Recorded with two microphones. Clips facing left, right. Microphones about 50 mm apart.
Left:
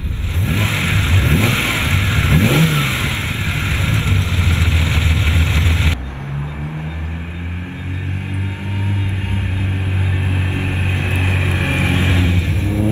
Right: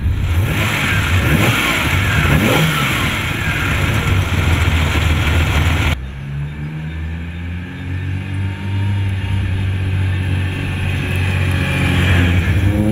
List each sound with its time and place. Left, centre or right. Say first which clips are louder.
0.5 s vehicle: right 1 dB; right
10.5 s vehicle: left 1 dB; centre
12.1 s vehicle: right 2 dB; right